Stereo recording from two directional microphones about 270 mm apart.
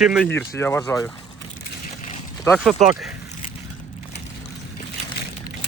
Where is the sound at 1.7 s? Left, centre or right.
Left.